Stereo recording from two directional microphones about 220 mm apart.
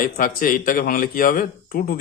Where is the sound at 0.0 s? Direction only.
40° left (ahead or behind).